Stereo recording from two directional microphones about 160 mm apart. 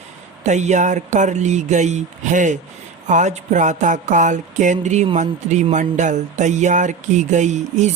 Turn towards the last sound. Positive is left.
turn(degrees=-45)  # may be behind; listen again after turning